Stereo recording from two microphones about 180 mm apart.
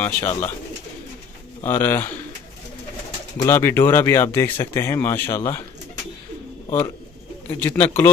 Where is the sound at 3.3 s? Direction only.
15° left (ahead or behind).